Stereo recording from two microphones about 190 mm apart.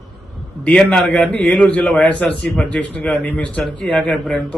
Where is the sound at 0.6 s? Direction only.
5° left (ahead or behind).